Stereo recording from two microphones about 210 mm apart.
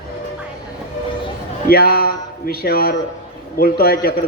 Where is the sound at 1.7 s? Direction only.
45° left (ahead or behind).